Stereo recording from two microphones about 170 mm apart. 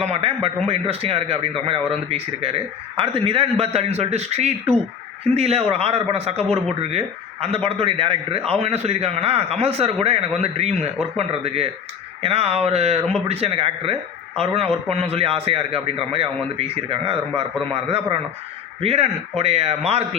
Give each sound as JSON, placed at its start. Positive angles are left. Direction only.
{"t": 0.0, "sound": "a man's voice", "side_deg": -35}